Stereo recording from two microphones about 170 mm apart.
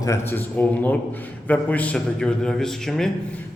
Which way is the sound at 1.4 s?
10° left (ahead or behind).